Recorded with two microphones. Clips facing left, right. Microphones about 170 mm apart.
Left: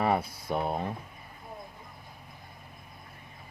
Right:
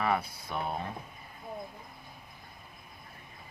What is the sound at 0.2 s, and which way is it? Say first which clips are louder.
Speech: left 5 dB; 35° left (ahead or behind).